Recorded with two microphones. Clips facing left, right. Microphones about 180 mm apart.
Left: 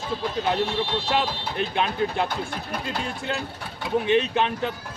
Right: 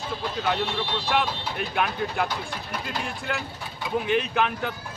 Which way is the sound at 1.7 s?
25° left (ahead or behind).